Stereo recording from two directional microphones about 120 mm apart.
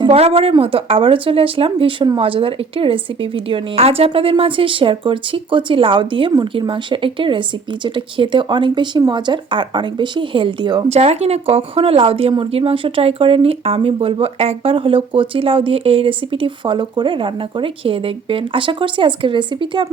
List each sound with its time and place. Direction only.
0.1 s speech: 55° right (ahead or behind); by 10.8 s 40° right (ahead or behind)
10.8 s speech: 60° right (ahead or behind); by 19.9 s 40° right (ahead or behind)